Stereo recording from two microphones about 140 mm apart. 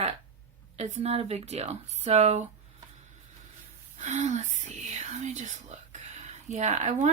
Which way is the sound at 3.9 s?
60° right (ahead or behind).